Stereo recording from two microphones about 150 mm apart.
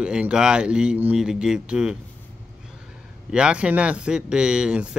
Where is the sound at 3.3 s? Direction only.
5° right (ahead or behind).